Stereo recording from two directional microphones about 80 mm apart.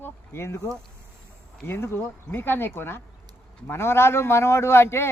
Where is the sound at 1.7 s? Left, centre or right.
Left.